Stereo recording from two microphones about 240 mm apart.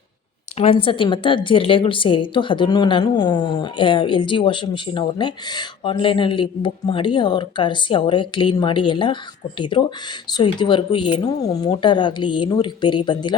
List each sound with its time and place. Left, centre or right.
0.5 s a woman's voice: left